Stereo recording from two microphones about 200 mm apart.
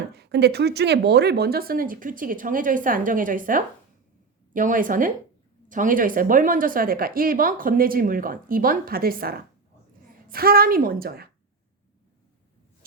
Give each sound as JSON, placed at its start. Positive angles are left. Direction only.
{"t": 0.1, "sound": "speech", "side_deg": -55}